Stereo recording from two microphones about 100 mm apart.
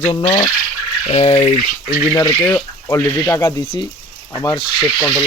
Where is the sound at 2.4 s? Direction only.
30° left (ahead or behind).